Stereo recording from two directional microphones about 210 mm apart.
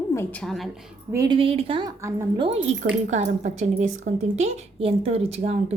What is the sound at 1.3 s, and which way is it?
A woman's voice, 25° right (ahead or behind).